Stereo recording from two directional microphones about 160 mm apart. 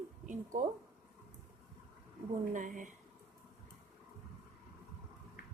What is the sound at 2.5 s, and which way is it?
Speech, 55° right (ahead or behind).